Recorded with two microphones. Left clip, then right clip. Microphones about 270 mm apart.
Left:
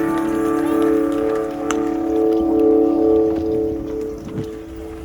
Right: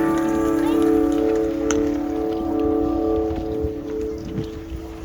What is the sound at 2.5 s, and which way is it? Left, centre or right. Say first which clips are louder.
Music: left 5 dB; left.